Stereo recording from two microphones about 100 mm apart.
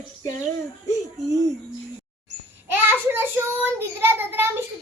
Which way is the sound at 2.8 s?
20° right (ahead or behind).